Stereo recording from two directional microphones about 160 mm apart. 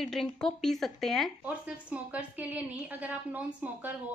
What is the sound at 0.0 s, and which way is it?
Speech, centre (ahead or behind).